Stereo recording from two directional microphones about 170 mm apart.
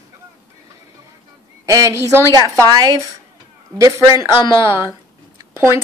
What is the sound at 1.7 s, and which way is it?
Speech, 20° right (ahead or behind).